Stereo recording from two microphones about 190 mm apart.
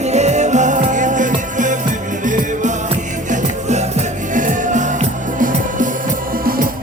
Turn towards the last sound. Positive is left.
turn(degrees=-45)  # may be behind; listen again after turning